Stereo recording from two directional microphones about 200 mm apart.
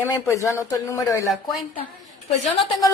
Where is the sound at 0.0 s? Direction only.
15° left (ahead or behind).